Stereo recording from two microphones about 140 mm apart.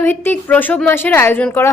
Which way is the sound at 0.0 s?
15° left (ahead or behind).